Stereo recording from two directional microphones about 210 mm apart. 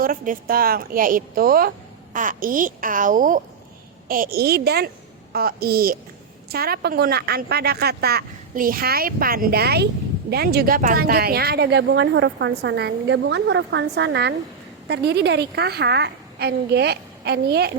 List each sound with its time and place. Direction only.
0.0 s a child's voice: 45° right (ahead or behind)